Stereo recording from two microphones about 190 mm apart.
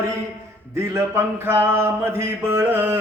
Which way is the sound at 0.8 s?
15° right (ahead or behind).